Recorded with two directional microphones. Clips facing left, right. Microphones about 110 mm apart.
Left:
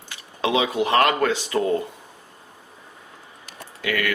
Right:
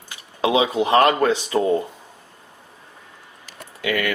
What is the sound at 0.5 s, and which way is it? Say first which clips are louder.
Speech: right 3 dB; 25° right (ahead or behind).